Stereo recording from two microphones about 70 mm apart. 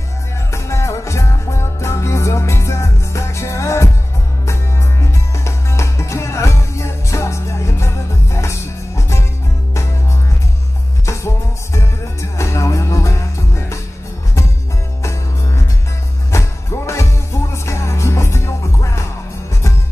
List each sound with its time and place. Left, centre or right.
0.5 s music: left
5.1 s music: left
11.1 s music: left
15.0 s music: left